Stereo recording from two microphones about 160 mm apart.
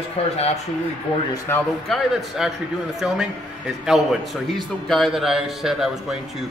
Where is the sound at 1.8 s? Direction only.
Centre (ahead or behind).